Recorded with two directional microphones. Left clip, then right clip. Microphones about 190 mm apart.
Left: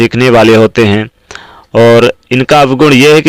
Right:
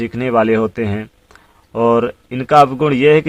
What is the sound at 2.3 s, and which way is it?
Speech, 35° left (ahead or behind).